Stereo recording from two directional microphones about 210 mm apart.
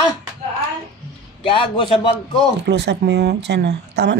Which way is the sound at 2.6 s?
55° right (ahead or behind).